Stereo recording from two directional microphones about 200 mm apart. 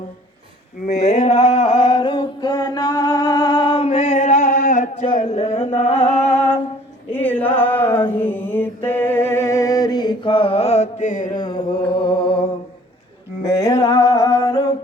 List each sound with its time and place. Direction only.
0.9 s a sound: 35° left (ahead or behind)
6.0 s music: 10° left (ahead or behind)
7.1 s a sound: 10° left (ahead or behind)
8.2 s music: 10° left (ahead or behind); by 11.4 s 40° left (ahead or behind)
12.0 s mantra: 25° left (ahead or behind)
13.6 s music: 20° left (ahead or behind)